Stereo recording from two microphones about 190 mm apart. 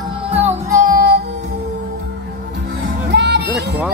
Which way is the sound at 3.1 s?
60° right (ahead or behind).